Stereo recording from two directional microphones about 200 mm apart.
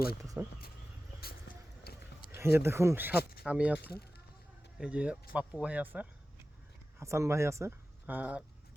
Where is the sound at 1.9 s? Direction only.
50° left (ahead or behind).